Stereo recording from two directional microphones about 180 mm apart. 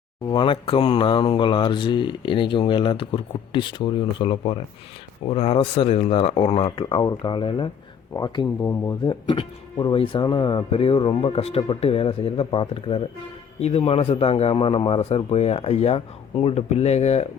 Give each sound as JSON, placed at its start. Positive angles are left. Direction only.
{"t": 0.3, "sound": "speech", "side_deg": 25}